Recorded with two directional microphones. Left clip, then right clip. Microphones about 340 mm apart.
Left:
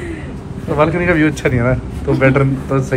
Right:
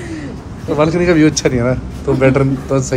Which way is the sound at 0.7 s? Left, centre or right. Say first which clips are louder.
Right 1 dB; centre.